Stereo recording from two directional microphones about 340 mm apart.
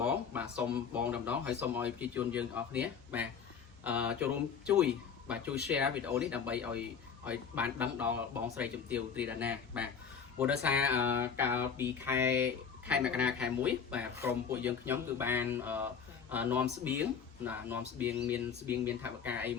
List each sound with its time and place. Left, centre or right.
0.0 s speech: centre